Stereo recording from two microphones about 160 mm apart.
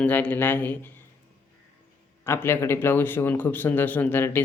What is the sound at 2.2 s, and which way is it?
Speech, 15° left (ahead or behind).